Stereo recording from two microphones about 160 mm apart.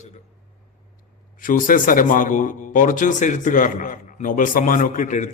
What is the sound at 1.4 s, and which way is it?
A man's voice, 60° left (ahead or behind).